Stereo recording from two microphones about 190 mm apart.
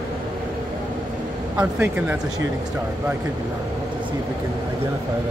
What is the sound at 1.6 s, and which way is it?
Speech, 10° right (ahead or behind).